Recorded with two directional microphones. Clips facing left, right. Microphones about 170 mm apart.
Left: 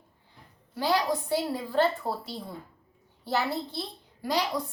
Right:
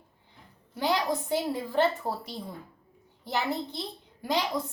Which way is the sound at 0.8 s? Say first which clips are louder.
Left 1 dB; 20° right (ahead or behind).